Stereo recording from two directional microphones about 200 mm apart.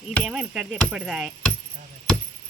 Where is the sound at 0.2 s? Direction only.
5° right (ahead or behind).